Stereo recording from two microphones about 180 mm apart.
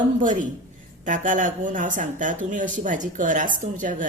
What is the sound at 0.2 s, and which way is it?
Speech, 45° right (ahead or behind).